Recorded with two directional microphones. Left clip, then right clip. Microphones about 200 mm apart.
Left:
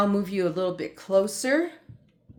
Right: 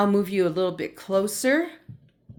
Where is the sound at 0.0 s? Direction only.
25° right (ahead or behind).